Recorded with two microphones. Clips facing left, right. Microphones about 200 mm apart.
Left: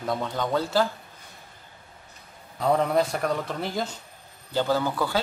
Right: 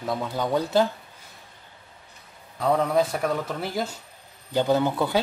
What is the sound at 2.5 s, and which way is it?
Speech, centre (ahead or behind).